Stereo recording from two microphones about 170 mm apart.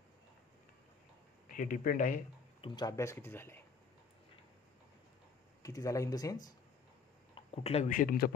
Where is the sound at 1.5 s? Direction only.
55° left (ahead or behind).